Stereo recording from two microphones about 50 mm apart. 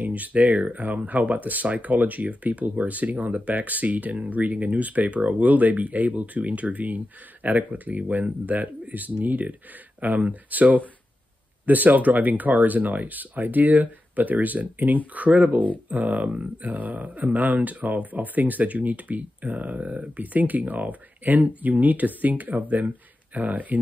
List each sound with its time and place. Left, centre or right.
0.0 s speech: right